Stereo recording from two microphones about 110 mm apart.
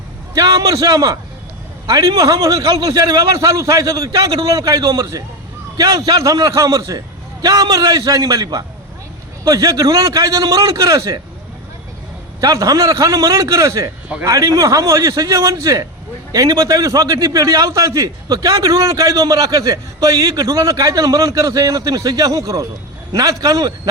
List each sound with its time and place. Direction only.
0.3 s a man's voice: 35° right (ahead or behind)
12.4 s a man's voice: 30° right (ahead or behind)